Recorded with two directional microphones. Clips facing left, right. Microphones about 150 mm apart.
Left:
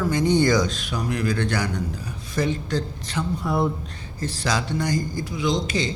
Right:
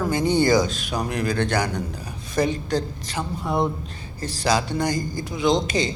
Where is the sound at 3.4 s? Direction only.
25° right (ahead or behind).